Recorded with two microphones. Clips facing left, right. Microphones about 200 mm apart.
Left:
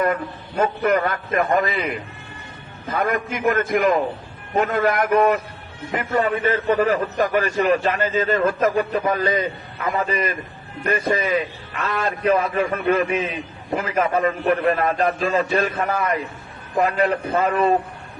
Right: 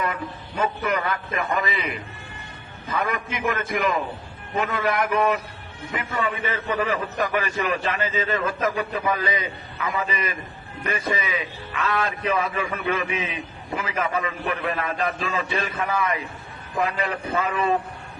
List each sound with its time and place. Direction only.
0.0 s a man's voice: 50° left (ahead or behind)
10.8 s a man's voice: 50° left (ahead or behind)